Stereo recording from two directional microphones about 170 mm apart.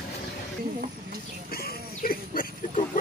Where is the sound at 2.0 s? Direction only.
55° left (ahead or behind).